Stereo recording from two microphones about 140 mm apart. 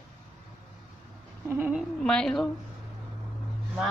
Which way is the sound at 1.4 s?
15° right (ahead or behind).